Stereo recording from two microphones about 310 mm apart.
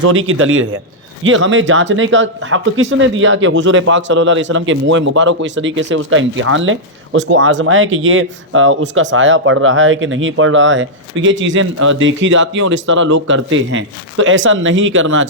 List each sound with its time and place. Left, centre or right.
0.0 s speech: right